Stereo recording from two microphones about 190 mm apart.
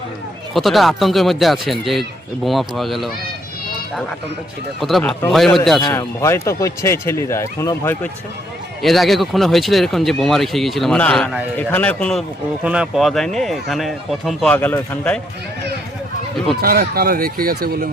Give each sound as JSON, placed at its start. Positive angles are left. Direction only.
{"t": 0.5, "sound": "speech", "side_deg": 0}
{"t": 4.8, "sound": "speech", "side_deg": 0}
{"t": 5.8, "sound": "speech", "side_deg": 20}
{"t": 8.8, "sound": "speech", "side_deg": 0}
{"t": 16.6, "sound": "speech", "side_deg": -50}